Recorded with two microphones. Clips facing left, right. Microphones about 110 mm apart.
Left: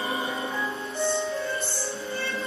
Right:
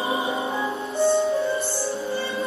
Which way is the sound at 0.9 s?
30° right (ahead or behind).